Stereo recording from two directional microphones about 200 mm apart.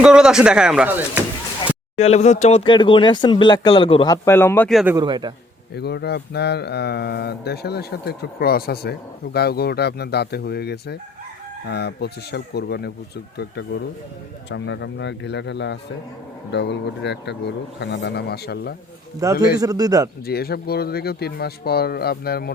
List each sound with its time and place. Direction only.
0.0 s speech: 5° right (ahead or behind)
2.0 s speech: 35° left (ahead or behind); by 4.8 s 10° left (ahead or behind)
4.9 s a man's voice: 20° right (ahead or behind)
5.7 s speech: 55° left (ahead or behind)
19.2 s speech: 15° right (ahead or behind)
20.2 s speech: 50° left (ahead or behind)